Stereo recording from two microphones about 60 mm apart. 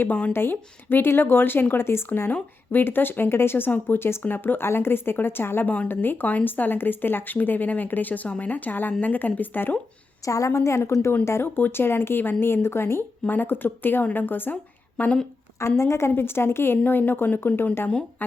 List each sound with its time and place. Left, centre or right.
0.3 s speech: left
10.2 s a woman's voice: left
11.5 s speech: left
15.8 s speech: left